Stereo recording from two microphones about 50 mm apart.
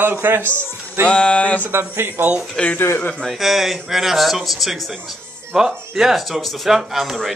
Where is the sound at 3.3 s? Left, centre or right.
Centre.